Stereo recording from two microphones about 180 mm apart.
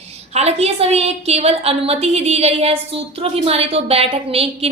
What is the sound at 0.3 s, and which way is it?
A woman's voice, 35° right (ahead or behind).